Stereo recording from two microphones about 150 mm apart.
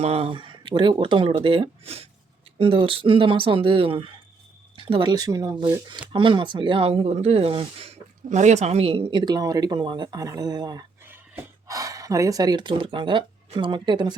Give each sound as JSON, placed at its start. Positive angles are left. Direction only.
{"t": 0.0, "sound": "speech", "side_deg": -40}